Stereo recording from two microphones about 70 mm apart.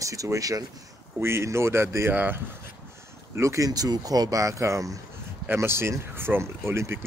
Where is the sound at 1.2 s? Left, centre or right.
Right.